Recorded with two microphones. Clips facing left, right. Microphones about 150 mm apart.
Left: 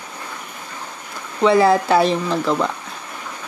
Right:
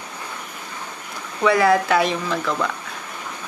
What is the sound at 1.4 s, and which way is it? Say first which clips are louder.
Speech: left 3 dB; 25° left (ahead or behind).